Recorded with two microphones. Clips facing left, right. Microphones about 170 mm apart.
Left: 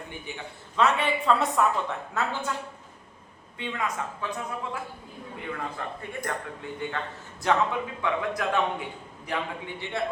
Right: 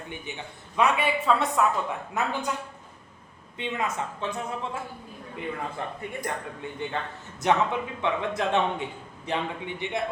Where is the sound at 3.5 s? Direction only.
20° right (ahead or behind).